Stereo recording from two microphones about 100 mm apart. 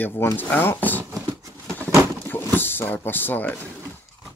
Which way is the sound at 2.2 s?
20° left (ahead or behind).